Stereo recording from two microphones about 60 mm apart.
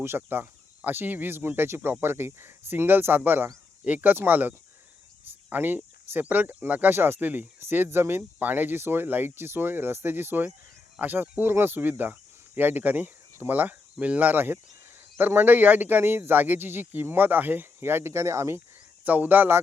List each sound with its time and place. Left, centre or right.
0.2 s speech: right
6.9 s speech: right
19.0 s speech: right